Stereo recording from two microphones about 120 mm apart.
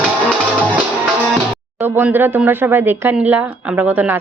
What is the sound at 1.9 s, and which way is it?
Speech, 15° right (ahead or behind).